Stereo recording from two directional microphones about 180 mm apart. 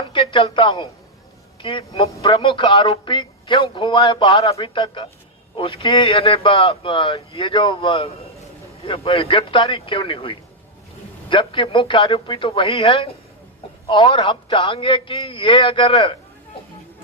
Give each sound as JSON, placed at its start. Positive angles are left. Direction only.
{"t": 0.1, "sound": "speech", "side_deg": 30}